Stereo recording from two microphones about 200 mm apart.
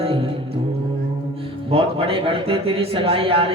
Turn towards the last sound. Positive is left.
turn(degrees=-30)  # may be behind; listen again after turning